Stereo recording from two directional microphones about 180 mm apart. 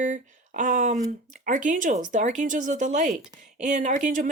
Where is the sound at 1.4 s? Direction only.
45° right (ahead or behind).